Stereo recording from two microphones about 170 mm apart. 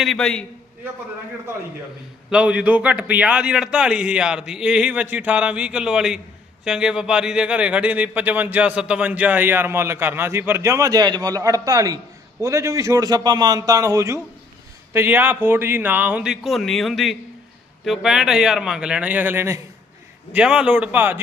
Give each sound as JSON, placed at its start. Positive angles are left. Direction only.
{"t": 0.0, "sound": "a man's voice", "side_deg": 0}
{"t": 2.3, "sound": "a man's voice", "side_deg": -5}